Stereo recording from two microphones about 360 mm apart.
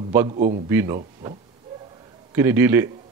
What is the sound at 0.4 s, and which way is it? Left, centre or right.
Speech, right.